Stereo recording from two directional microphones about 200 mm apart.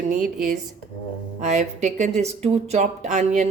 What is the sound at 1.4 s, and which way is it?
Speech, 35° right (ahead or behind).